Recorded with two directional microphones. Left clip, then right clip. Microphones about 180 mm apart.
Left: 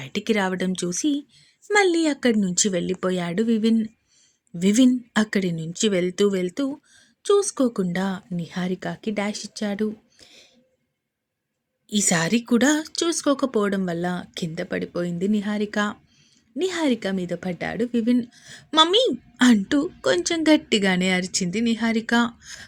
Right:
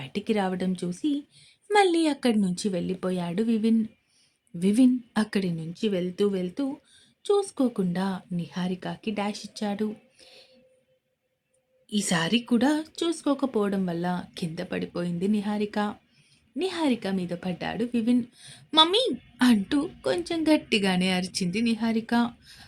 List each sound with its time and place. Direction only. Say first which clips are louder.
0.0 s a woman's voice: left 4 dB; 20° left (ahead or behind)
11.9 s speech: left 4 dB; 25° left (ahead or behind)